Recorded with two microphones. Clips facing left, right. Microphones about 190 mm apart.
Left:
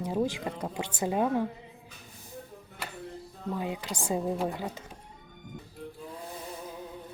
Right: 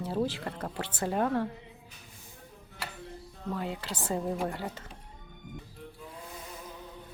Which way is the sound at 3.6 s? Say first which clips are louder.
Left 3 dB; 15° left (ahead or behind).